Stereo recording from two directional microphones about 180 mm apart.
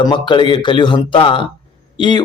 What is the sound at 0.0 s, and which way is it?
A man's voice, 25° left (ahead or behind).